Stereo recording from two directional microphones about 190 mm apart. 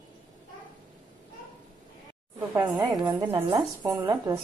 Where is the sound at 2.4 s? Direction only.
15° right (ahead or behind).